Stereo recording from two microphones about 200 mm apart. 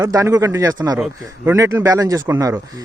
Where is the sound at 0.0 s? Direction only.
15° right (ahead or behind).